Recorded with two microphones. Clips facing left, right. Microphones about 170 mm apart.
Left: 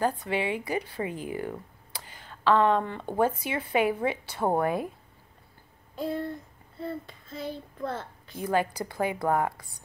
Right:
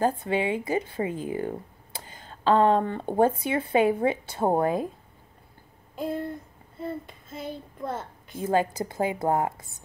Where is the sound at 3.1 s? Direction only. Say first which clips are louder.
Right 4 dB; 25° right (ahead or behind).